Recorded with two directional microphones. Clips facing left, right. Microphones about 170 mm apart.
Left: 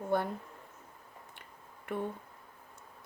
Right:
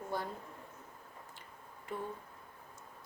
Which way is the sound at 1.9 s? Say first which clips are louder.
Left 5 dB; 60° left (ahead or behind).